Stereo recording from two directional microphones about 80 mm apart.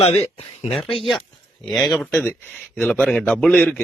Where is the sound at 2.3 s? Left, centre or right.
Left.